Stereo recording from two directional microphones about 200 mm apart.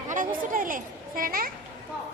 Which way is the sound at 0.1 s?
40° right (ahead or behind).